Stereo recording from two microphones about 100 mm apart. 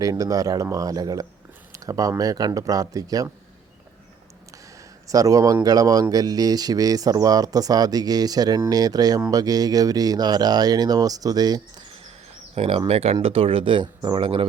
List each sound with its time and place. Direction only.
0.0 s speech: 40° right (ahead or behind)
5.0 s speech: 35° right (ahead or behind)
12.5 s speech: 90° right
13.2 s speech: 70° right (ahead or behind); by 14.3 s 50° right (ahead or behind)